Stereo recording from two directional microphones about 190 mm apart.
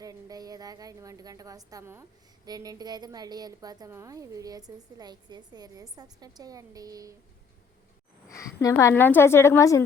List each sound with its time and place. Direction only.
0.0 s a woman's voice: 20° right (ahead or behind)
8.6 s a woman's voice: 15° left (ahead or behind)